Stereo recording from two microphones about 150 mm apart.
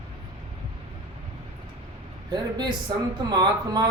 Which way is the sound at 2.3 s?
30° right (ahead or behind).